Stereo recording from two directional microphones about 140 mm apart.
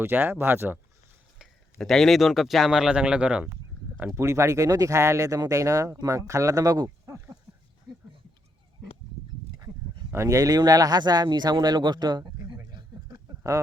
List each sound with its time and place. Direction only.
0.0 s speech: 15° right (ahead or behind)
1.4 s speech: centre (ahead or behind); by 7.3 s 20° right (ahead or behind)
10.1 s speech: 20° right (ahead or behind)
13.4 s speech: 20° right (ahead or behind)